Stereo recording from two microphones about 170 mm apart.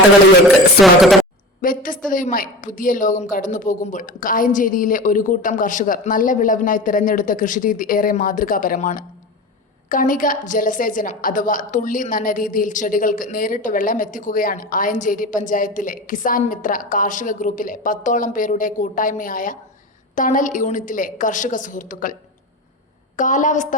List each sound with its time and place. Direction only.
1.0 s a woman's voice: centre (ahead or behind)
1.6 s a woman's voice: 55° left (ahead or behind)